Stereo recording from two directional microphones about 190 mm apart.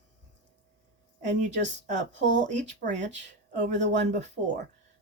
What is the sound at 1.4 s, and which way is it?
Speech, 40° right (ahead or behind).